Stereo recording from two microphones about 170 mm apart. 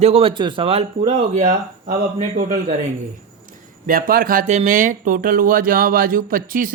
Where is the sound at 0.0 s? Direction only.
35° right (ahead or behind).